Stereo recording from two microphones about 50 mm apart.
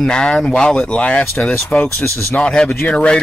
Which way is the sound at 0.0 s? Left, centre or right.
Centre.